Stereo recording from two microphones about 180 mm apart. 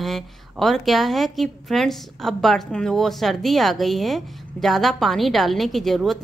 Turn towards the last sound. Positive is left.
turn(degrees=0)  # may be behind; listen again after turning